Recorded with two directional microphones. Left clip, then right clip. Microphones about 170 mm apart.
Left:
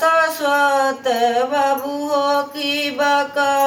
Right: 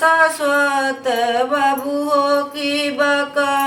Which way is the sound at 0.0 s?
15° right (ahead or behind).